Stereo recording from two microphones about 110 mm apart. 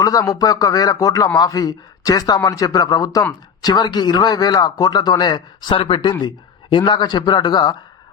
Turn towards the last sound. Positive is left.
turn(degrees=40)  # may be behind; listen again after turning